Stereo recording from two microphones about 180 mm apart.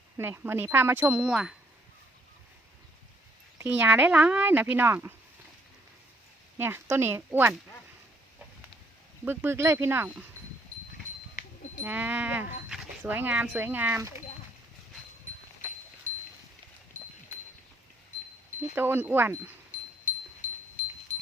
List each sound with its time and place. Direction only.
0.2 s speech: 10° right (ahead or behind)
3.6 s speech: 10° right (ahead or behind)
6.6 s speech: 10° right (ahead or behind)
9.2 s speech: 10° right (ahead or behind)
11.8 s speech: 10° right (ahead or behind)
18.7 s speech: 10° right (ahead or behind)
20.4 s wind chime: 45° left (ahead or behind)
21.1 s a sound: 40° left (ahead or behind)